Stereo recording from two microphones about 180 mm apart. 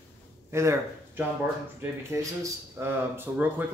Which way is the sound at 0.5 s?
15° right (ahead or behind).